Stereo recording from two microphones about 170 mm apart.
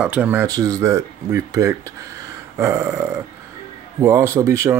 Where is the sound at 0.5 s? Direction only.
20° right (ahead or behind).